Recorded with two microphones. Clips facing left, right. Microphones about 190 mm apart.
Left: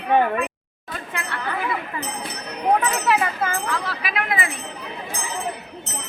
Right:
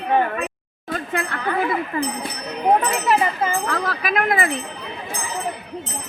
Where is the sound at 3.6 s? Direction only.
45° right (ahead or behind).